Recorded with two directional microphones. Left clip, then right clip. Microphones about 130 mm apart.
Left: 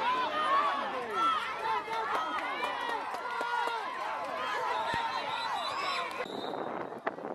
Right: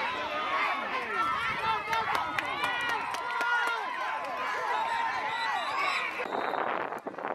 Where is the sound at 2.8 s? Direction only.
35° right (ahead or behind).